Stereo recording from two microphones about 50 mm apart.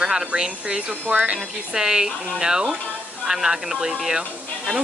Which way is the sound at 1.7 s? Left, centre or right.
Centre.